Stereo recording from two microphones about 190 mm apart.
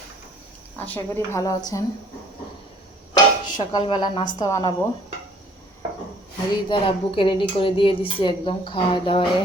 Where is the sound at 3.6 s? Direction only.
20° left (ahead or behind).